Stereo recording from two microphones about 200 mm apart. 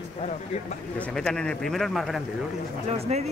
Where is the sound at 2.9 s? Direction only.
30° right (ahead or behind).